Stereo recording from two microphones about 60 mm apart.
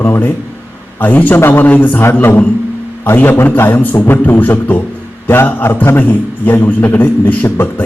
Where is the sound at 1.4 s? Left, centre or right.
Left.